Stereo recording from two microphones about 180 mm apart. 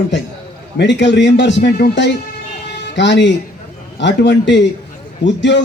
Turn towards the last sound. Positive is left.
turn(degrees=85)